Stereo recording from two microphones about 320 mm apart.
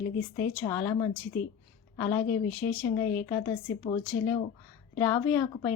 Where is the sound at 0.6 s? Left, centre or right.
Centre.